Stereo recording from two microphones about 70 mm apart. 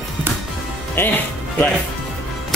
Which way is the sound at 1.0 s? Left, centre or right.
Left.